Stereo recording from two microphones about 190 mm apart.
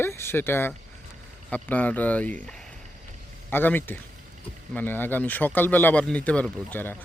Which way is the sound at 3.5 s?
10° left (ahead or behind).